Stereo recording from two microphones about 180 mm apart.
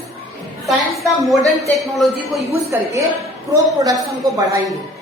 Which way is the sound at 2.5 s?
15° right (ahead or behind).